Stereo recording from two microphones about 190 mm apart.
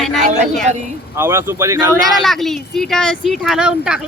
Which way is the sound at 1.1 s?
15° right (ahead or behind).